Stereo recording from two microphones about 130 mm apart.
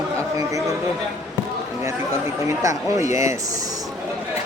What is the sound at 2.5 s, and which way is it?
Speech, 25° right (ahead or behind).